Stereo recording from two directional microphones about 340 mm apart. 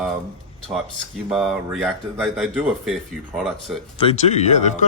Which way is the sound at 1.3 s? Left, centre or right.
Centre.